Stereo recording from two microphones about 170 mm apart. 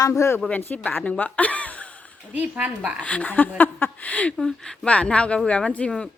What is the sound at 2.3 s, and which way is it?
Speech, 10° right (ahead or behind).